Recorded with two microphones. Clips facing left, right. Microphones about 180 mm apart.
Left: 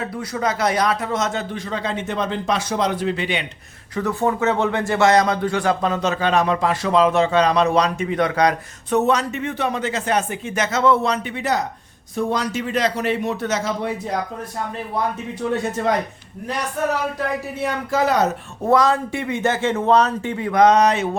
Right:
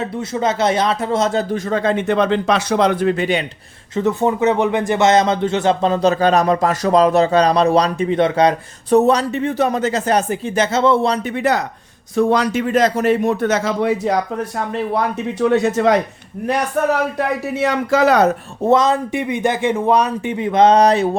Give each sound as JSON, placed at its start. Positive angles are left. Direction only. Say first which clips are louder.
{"t": 0.0, "sound": "speech", "louder": "right 4 dB", "side_deg": -25}
{"t": 3.9, "sound": "speech", "louder": "right 4 dB", "side_deg": -20}
{"t": 11.3, "sound": "speech", "louder": "right 6 dB", "side_deg": -60}
{"t": 12.1, "sound": "speech", "louder": "right 7 dB", "side_deg": -70}
{"t": 13.8, "sound": "speech", "louder": "right 7 dB", "side_deg": -85}
{"t": 16.5, "sound": "a man's voice", "louder": "right 5 dB", "side_deg": -60}
{"t": 18.7, "sound": "a man's voice", "louder": "right 2 dB", "side_deg": -20}